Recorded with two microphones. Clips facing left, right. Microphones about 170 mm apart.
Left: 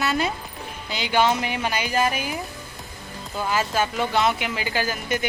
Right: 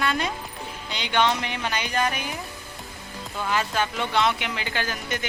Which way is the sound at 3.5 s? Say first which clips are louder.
Left 2 dB; 5° left (ahead or behind).